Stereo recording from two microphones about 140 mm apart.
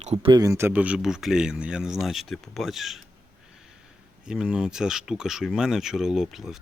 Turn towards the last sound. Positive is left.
turn(degrees=-5)  # may be behind; listen again after turning